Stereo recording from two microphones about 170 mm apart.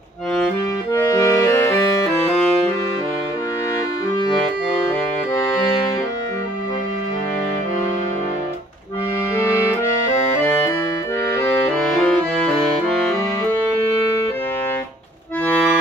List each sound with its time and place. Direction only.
0.9 s music: 20° left (ahead or behind)
10.4 s accordion: 15° left (ahead or behind)
12.0 s accordion: 5° left (ahead or behind)